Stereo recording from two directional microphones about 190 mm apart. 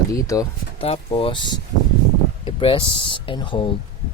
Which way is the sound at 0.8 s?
30° left (ahead or behind).